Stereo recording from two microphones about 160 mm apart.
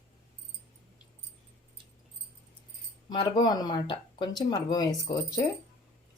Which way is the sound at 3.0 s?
30° left (ahead or behind).